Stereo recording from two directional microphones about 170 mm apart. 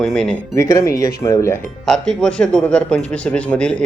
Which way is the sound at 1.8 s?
5° left (ahead or behind).